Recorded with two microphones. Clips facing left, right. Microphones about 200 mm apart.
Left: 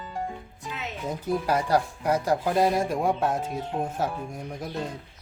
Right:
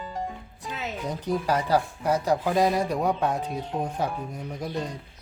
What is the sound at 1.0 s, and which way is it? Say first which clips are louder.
Speech: even; 10° left (ahead or behind).